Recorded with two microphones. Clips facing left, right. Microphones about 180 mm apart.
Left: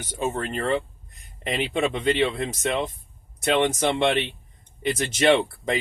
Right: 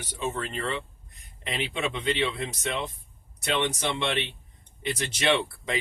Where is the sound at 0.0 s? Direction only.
45° left (ahead or behind).